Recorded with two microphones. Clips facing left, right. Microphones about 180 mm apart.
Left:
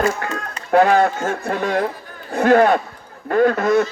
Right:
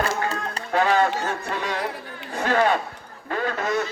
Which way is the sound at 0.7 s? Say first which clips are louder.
Left 6 dB; 50° left (ahead or behind).